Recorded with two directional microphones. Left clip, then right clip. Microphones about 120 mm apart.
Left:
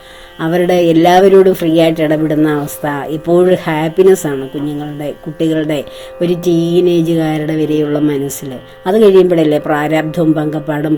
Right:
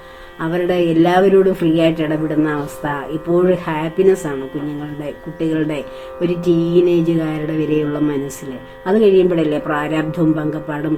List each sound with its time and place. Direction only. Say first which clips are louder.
0.3 s speech: left 6 dB; 50° left (ahead or behind)
5.4 s speech: left 5 dB; 50° left (ahead or behind)
8.8 s speech: left 5 dB; 50° left (ahead or behind)